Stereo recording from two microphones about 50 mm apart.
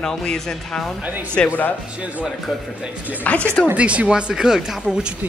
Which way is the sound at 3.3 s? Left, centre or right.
Left.